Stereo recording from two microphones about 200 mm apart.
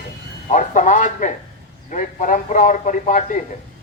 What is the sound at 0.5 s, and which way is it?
Speech, 40° left (ahead or behind).